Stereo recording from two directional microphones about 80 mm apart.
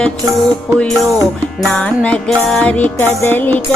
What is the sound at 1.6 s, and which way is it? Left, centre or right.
Music, centre.